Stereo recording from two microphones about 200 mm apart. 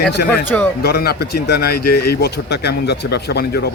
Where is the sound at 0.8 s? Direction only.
55° left (ahead or behind).